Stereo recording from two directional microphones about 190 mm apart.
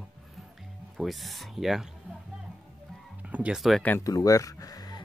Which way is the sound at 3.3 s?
5° right (ahead or behind).